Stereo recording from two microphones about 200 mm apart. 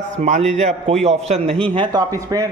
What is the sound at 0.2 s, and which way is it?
A man's voice, 35° right (ahead or behind).